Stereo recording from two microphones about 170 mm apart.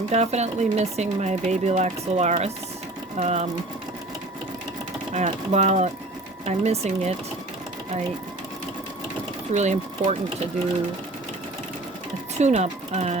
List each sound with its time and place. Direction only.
0.1 s speech: 40° right (ahead or behind)
5.1 s speech: 45° right (ahead or behind)
9.5 s speech: 45° right (ahead or behind)
12.4 s speech: 40° right (ahead or behind)